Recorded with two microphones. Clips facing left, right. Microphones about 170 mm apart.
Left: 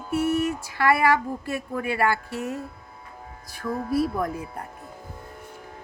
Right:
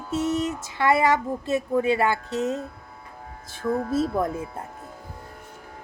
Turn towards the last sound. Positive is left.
turn(degrees=-25)  # may be behind; listen again after turning